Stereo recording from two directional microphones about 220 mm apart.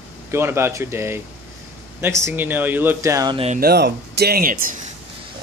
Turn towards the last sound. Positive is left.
turn(degrees=-40)  # may be behind; listen again after turning